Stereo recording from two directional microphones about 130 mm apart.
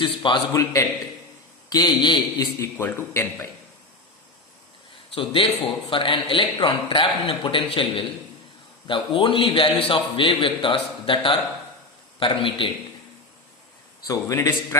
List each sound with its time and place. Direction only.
0.0 s a man's voice: 40° left (ahead or behind)
0.5 s a man's voice: 25° left (ahead or behind)
2.6 s speech: 20° left (ahead or behind)
5.1 s a man's voice: 40° left (ahead or behind)
14.1 s speech: 25° left (ahead or behind)